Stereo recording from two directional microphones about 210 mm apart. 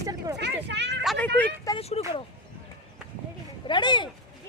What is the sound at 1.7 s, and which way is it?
Speech, 30° left (ahead or behind).